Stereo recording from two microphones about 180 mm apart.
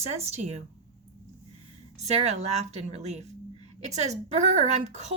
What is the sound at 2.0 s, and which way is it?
A woman's voice, 40° right (ahead or behind).